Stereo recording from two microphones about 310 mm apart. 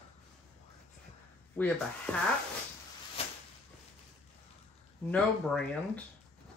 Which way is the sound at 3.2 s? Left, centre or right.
Centre.